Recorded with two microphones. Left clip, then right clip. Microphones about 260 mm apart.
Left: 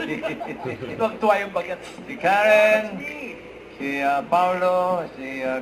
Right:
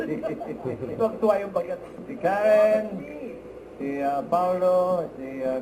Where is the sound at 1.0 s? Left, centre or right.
Centre.